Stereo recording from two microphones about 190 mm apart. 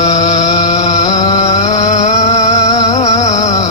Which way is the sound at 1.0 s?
20° left (ahead or behind).